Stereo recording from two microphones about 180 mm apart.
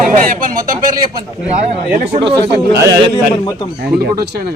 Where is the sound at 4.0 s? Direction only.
65° right (ahead or behind).